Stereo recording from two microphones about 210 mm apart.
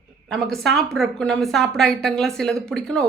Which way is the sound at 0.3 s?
Centre (ahead or behind).